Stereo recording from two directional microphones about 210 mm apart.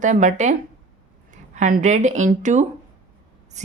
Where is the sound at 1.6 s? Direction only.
35° right (ahead or behind).